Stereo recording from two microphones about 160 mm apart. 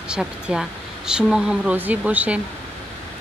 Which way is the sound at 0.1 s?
5° right (ahead or behind).